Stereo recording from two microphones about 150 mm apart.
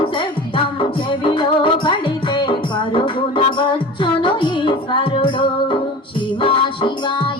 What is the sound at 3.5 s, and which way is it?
Music, 35° left (ahead or behind).